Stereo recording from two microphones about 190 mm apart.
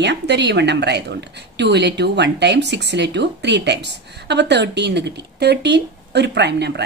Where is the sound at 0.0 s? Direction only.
65° right (ahead or behind).